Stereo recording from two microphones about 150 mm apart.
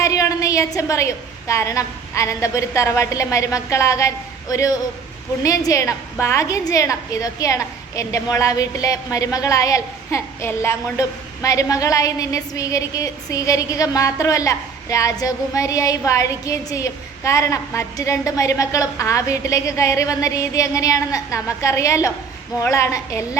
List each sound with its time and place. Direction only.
0.0 s a woman's voice: 20° left (ahead or behind)